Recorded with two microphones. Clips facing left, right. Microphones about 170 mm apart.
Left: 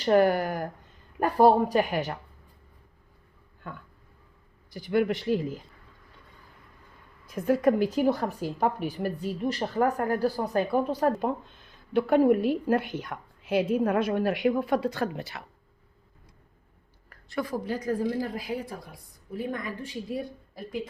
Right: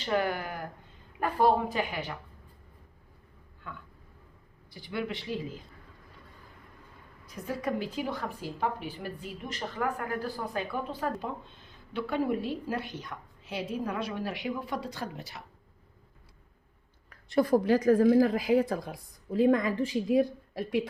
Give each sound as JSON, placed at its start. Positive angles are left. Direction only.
{"t": 0.0, "sound": "a woman's voice", "side_deg": 40}
{"t": 3.6, "sound": "a woman's voice", "side_deg": 45}
{"t": 7.3, "sound": "a woman's voice", "side_deg": 55}
{"t": 17.7, "sound": "a woman's voice", "side_deg": -90}